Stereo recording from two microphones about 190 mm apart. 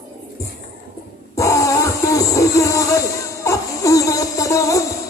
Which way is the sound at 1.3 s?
15° left (ahead or behind).